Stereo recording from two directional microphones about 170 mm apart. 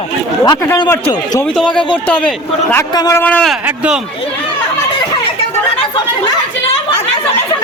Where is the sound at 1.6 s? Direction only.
30° left (ahead or behind).